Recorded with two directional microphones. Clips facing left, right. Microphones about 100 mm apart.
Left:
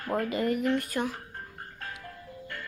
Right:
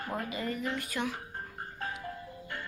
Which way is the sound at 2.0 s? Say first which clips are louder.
Right 2 dB; 10° right (ahead or behind).